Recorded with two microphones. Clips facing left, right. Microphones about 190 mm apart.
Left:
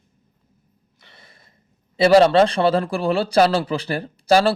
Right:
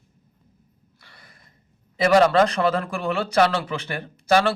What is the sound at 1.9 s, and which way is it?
Speech, 30° left (ahead or behind).